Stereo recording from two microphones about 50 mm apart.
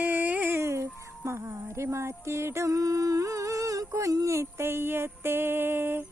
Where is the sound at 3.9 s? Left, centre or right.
Right.